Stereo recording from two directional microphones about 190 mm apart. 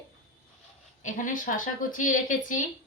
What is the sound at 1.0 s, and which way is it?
Speech, 40° left (ahead or behind).